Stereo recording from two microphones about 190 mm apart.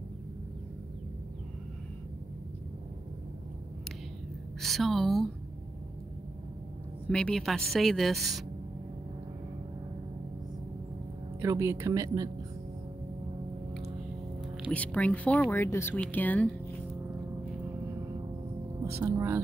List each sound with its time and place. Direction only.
4.6 s speech: centre (ahead or behind)
7.1 s speech: 5° left (ahead or behind)
11.4 s speech: 15° right (ahead or behind)
14.7 s speech: 5° left (ahead or behind)
18.9 s music: 15° right (ahead or behind)